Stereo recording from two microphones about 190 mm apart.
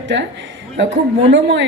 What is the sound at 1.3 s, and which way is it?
Speech, 70° right (ahead or behind).